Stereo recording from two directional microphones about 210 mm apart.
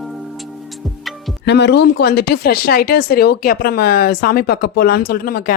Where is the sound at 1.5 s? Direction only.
55° left (ahead or behind).